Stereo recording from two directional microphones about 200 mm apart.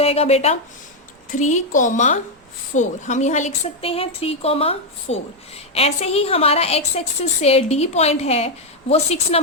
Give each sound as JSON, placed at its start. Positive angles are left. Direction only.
{"t": 0.0, "sound": "a woman's voice", "side_deg": 30}